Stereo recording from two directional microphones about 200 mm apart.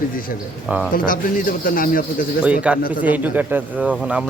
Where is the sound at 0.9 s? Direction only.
45° left (ahead or behind).